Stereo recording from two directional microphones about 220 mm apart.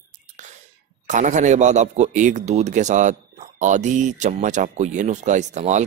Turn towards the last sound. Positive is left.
turn(degrees=-35)  # may be behind; listen again after turning